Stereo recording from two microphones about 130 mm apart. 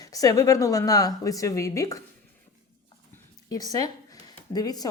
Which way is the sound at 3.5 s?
30° left (ahead or behind).